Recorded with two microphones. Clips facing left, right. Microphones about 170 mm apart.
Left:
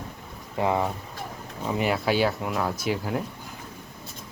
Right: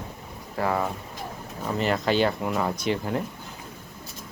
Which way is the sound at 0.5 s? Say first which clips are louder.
Left 1 dB; 20° left (ahead or behind).